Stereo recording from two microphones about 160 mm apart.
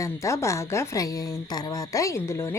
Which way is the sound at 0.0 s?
20° left (ahead or behind).